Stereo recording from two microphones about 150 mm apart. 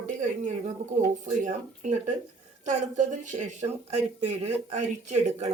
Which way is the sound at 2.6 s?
55° right (ahead or behind).